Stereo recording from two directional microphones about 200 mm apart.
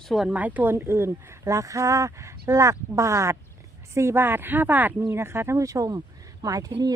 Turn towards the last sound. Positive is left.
turn(degrees=-20)  # may be behind; listen again after turning